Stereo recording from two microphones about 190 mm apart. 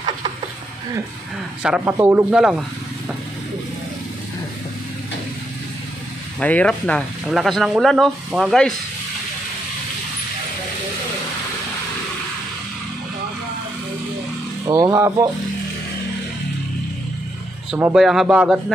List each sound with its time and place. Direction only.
1.6 s speech: 5° right (ahead or behind)
6.4 s speech: 5° left (ahead or behind)
14.7 s speech: 15° right (ahead or behind)
17.9 s speech: centre (ahead or behind)